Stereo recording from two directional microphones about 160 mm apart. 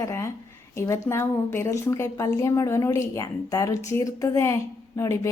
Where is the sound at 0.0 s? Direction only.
20° left (ahead or behind).